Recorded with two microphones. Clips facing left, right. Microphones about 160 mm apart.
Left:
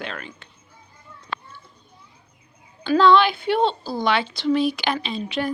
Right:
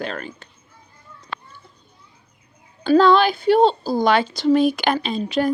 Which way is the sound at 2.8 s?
45° right (ahead or behind).